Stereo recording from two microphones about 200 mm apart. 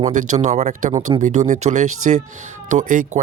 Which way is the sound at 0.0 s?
35° right (ahead or behind).